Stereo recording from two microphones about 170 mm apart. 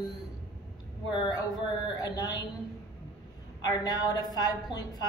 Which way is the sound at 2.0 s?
25° left (ahead or behind).